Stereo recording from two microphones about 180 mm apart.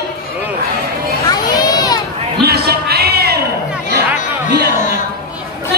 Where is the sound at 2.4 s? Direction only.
60° right (ahead or behind).